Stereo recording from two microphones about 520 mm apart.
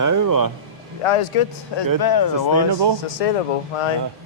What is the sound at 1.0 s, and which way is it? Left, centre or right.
Speech, left.